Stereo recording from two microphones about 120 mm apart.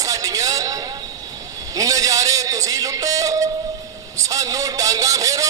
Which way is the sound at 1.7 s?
30° right (ahead or behind).